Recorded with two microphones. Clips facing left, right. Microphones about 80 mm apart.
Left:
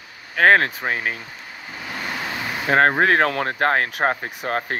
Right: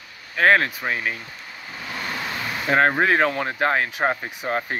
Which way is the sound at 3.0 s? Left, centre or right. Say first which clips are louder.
Left 2 dB; left.